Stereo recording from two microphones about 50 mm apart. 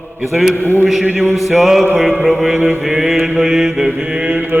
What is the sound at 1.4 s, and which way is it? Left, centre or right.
Music, centre.